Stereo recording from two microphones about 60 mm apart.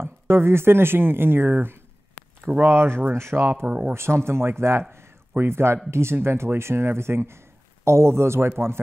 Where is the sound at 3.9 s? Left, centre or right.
Right.